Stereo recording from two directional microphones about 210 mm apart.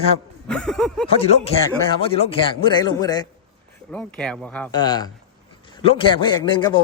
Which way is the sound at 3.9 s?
5° left (ahead or behind).